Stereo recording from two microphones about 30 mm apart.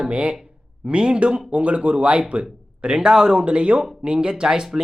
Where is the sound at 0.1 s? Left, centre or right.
Right.